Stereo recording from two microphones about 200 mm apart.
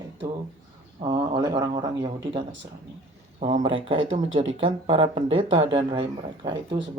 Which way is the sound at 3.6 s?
25° right (ahead or behind).